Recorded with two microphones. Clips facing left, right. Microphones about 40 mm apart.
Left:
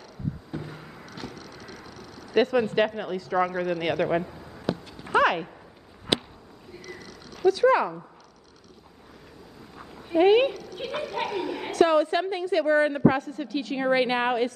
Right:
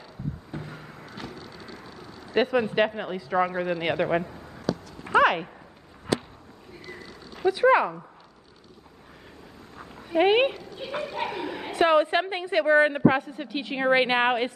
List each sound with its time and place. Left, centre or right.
0.5 s vehicle: centre
1.3 s a sound: left
2.3 s a woman's voice: centre
4.1 s speech: centre
5.2 s a sound: centre
7.3 s speech: right
10.1 s a woman's voice: right
10.8 s speech: left
11.3 s a woman's voice: centre
11.7 s a woman's voice: right